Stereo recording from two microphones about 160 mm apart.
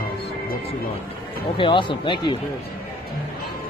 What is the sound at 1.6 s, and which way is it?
Speech, 30° left (ahead or behind).